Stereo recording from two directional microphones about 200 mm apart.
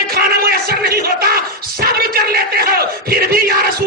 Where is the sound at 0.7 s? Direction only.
50° right (ahead or behind).